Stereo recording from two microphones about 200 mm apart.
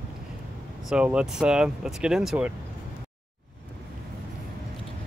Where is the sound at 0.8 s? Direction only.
5° right (ahead or behind).